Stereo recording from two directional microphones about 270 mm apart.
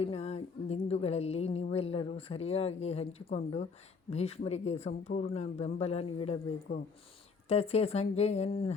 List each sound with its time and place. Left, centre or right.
0.0 s a sound: left
4.1 s speech: left
7.4 s speech: left